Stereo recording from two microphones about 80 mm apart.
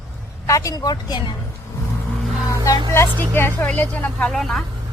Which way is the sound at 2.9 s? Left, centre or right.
Left.